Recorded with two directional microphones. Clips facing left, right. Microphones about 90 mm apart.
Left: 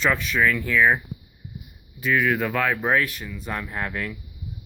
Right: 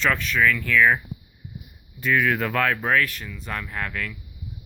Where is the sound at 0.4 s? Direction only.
20° left (ahead or behind).